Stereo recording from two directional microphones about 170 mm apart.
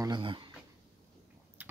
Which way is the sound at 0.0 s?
25° right (ahead or behind).